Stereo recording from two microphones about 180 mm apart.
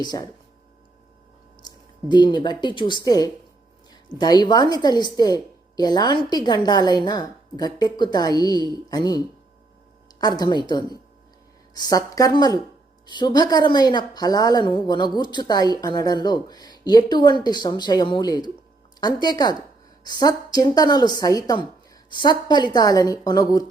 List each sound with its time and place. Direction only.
0.0 s a woman's voice: 25° left (ahead or behind)
1.6 s a woman's voice: 25° left (ahead or behind)